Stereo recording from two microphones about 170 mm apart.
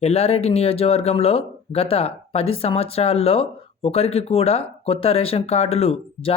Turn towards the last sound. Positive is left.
turn(degrees=35)  # may be behind; listen again after turning